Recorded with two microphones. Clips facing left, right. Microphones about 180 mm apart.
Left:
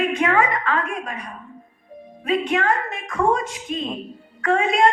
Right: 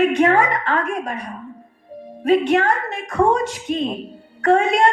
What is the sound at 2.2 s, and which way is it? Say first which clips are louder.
A woman's voice: right 5 dB; 35° right (ahead or behind).